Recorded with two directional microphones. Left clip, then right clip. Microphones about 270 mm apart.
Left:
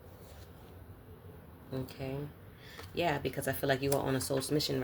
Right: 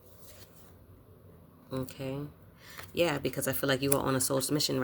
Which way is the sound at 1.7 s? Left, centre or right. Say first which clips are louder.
Right 3 dB; right.